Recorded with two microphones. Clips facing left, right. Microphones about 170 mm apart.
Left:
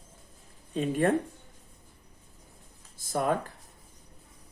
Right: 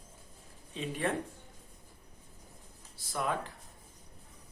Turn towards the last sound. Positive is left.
turn(degrees=45)  # may be behind; listen again after turning